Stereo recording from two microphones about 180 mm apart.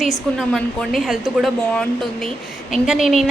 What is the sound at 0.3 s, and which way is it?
A woman's voice, centre (ahead or behind).